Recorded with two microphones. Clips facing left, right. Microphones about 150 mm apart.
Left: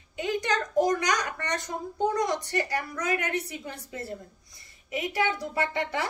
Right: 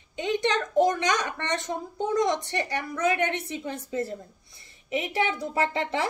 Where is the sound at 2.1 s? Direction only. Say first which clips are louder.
Right 2 dB; 20° right (ahead or behind).